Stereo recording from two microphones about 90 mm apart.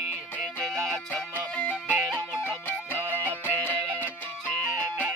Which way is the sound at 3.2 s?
20° left (ahead or behind).